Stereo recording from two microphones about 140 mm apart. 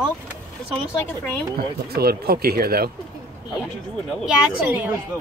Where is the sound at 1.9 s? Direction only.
90° right.